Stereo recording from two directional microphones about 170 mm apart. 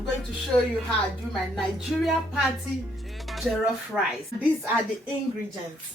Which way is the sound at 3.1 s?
Centre (ahead or behind).